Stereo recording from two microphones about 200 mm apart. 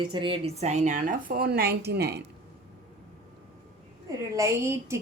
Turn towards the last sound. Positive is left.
turn(degrees=-15)  # may be behind; listen again after turning